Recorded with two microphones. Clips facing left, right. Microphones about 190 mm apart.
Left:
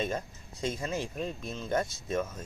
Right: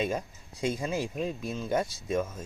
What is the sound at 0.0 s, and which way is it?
Speech, 10° right (ahead or behind).